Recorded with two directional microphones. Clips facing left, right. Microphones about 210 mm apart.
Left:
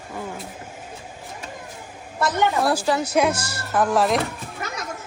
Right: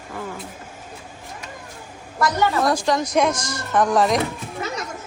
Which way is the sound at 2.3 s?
15° left (ahead or behind).